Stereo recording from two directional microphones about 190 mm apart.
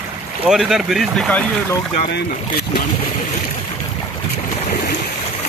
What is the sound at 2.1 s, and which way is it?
Speech, 55° left (ahead or behind).